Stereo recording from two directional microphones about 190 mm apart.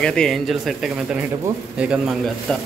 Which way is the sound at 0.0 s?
5° left (ahead or behind).